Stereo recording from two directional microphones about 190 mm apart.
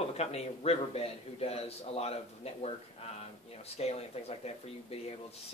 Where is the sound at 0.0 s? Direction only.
35° left (ahead or behind).